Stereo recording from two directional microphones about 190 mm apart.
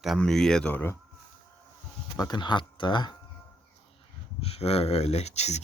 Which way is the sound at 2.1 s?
20° left (ahead or behind).